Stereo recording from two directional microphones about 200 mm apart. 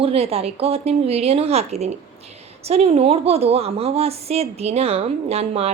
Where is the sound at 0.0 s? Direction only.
30° right (ahead or behind).